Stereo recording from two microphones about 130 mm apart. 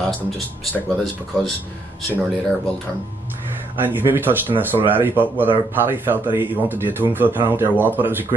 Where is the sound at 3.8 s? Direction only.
15° right (ahead or behind).